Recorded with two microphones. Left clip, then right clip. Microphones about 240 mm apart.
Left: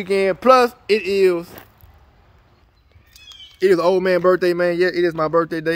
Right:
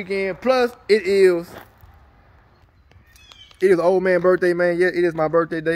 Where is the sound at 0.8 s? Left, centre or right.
Centre.